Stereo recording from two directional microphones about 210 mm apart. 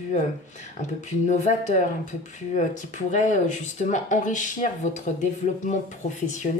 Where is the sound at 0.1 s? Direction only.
35° left (ahead or behind).